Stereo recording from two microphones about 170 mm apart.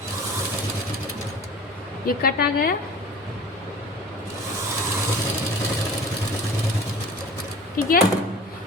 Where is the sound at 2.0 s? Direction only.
60° left (ahead or behind).